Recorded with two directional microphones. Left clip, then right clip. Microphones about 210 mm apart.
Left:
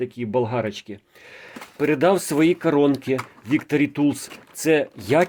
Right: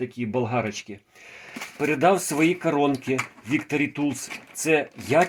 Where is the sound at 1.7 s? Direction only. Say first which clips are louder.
Left 2 dB; 45° left (ahead or behind).